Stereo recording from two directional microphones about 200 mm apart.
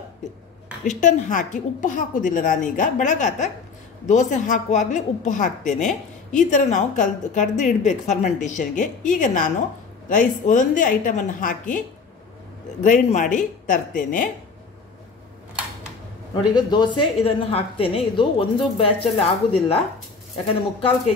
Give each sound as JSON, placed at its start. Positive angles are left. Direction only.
{"t": 0.8, "sound": "a woman's voice", "side_deg": 40}
{"t": 12.8, "sound": "a woman's voice", "side_deg": 40}
{"t": 16.5, "sound": "a woman's voice", "side_deg": 20}
{"t": 20.4, "sound": "a woman's voice", "side_deg": 25}